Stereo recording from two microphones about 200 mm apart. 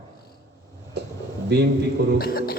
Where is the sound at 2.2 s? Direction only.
50° left (ahead or behind).